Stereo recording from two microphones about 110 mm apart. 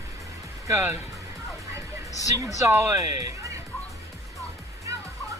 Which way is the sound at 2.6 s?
25° right (ahead or behind).